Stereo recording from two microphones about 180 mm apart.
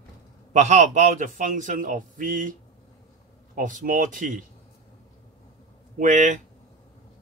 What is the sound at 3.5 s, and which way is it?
Speech, 45° right (ahead or behind).